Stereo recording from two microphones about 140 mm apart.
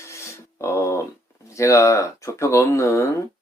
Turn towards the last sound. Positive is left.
turn(degrees=20)  # may be behind; listen again after turning